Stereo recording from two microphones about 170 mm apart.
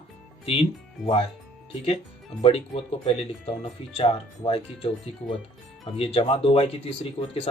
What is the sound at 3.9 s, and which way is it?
Speech, 35° left (ahead or behind).